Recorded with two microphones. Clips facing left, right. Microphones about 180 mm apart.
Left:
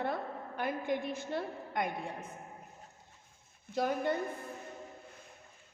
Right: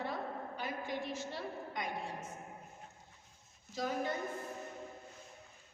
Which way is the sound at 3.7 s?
60° left (ahead or behind).